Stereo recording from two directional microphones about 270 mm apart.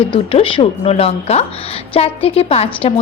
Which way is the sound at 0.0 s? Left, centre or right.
Centre.